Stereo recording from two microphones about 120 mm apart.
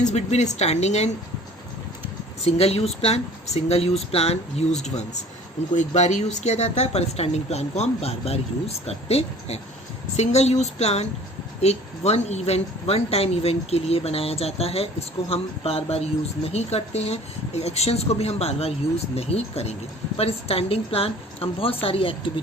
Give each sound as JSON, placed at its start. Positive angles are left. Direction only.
{"t": 0.0, "sound": "speech", "side_deg": 70}
{"t": 2.4, "sound": "a woman's voice", "side_deg": 55}